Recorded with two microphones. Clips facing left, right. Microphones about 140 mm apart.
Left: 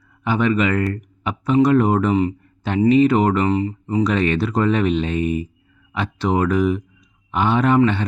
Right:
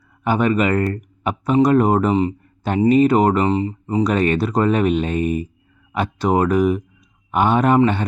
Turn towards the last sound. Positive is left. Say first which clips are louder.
# right 2 dB
turn(degrees=-45)  # may be behind; listen again after turning